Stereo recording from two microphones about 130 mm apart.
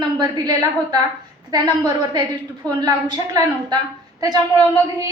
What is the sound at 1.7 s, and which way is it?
A woman's voice, 30° right (ahead or behind).